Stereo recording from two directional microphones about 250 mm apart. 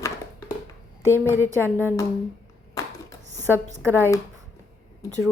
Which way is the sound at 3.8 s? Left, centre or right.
Centre.